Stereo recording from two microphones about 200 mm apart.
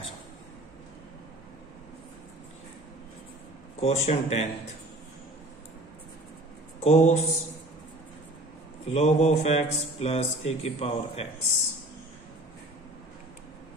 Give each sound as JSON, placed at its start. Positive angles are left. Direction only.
{"t": 3.8, "sound": "speech", "side_deg": 30}
{"t": 6.8, "sound": "speech", "side_deg": 35}
{"t": 8.8, "sound": "speech", "side_deg": 35}